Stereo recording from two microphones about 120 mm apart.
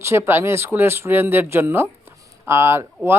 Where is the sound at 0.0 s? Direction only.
20° right (ahead or behind).